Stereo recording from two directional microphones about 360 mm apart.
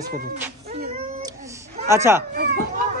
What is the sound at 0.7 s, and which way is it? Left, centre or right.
Cat, right.